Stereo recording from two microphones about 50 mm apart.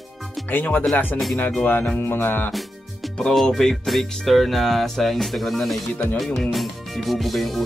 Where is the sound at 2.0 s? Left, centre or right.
Left.